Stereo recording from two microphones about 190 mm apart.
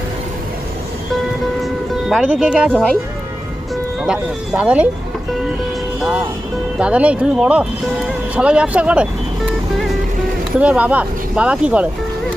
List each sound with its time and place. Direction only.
1.6 s music: centre (ahead or behind)
4.0 s speech: 5° right (ahead or behind)
6.7 s speech: 5° right (ahead or behind)
9.5 s music: centre (ahead or behind)
10.6 s speech: 5° right (ahead or behind)